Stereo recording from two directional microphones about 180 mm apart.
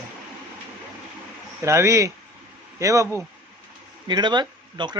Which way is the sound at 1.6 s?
15° right (ahead or behind).